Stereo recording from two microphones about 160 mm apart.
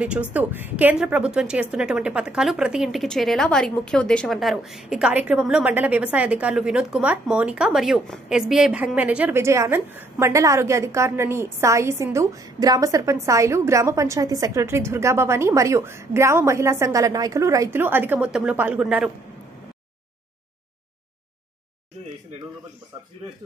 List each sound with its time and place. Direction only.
0.0 s a woman's voice: 10° right (ahead or behind)